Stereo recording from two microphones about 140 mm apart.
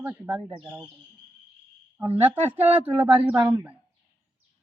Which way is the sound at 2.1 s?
15° right (ahead or behind).